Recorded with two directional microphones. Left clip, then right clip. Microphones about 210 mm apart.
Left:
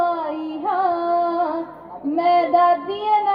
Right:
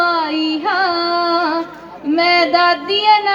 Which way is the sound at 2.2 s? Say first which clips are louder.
Right 3 dB; 50° left (ahead or behind).